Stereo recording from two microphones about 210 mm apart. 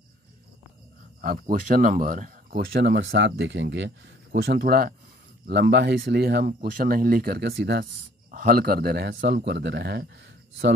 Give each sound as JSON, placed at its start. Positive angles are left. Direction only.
{"t": 1.2, "sound": "speech", "side_deg": -45}